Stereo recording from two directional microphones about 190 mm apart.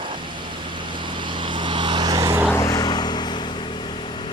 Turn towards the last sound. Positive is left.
turn(degrees=25)  # may be behind; listen again after turning